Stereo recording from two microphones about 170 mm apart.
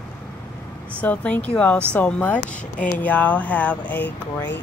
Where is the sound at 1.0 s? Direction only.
5° left (ahead or behind).